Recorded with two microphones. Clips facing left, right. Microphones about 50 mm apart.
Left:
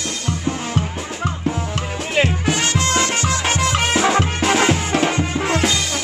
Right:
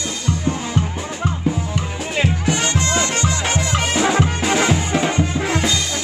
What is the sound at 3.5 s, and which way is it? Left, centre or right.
Music, left.